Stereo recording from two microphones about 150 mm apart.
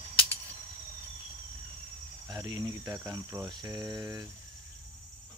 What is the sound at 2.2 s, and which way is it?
Speech, 25° right (ahead or behind).